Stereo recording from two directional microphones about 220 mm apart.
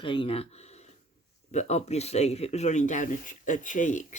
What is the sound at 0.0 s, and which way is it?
Speech, 20° left (ahead or behind).